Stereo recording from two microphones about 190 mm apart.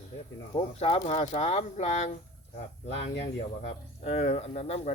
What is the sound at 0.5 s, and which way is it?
Speech, 30° left (ahead or behind).